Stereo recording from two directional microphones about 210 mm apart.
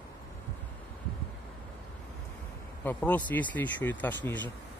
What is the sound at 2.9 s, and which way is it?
Speech, 5° left (ahead or behind).